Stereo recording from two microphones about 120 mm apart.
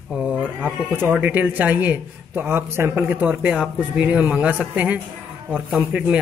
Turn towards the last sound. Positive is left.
turn(degrees=-10)  # may be behind; listen again after turning